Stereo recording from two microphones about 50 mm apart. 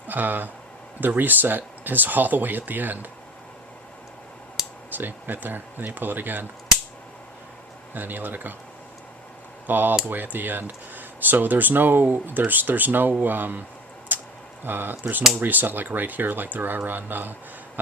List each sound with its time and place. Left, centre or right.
0.1 s speech: right
4.9 s speech: right
7.9 s speech: right
9.6 s speech: right
14.1 s a sound: right
14.6 s speech: right